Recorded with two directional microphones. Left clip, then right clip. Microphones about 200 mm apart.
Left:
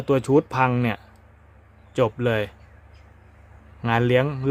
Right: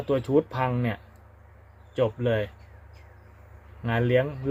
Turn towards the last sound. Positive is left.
turn(degrees=30)  # may be behind; listen again after turning